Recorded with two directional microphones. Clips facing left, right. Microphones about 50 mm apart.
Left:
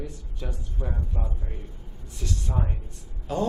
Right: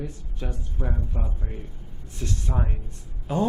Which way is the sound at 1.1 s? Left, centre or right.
Right.